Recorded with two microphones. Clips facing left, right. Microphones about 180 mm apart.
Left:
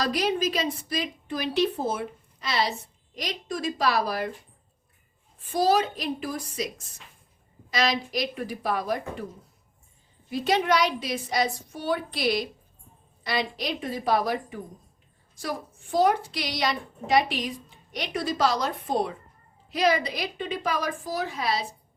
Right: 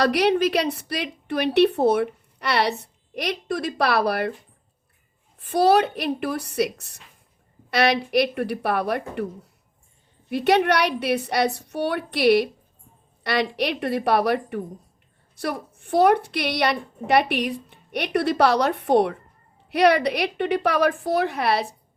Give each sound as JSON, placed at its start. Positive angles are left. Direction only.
{"t": 0.0, "sound": "a woman's voice", "side_deg": -70}
{"t": 5.4, "sound": "a woman's voice", "side_deg": -65}
{"t": 10.2, "sound": "a woman's voice", "side_deg": -65}